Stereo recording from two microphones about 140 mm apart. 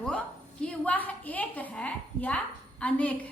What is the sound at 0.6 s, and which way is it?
A woman's voice, 10° left (ahead or behind).